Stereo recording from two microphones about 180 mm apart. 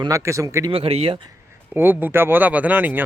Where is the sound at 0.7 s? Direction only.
30° right (ahead or behind).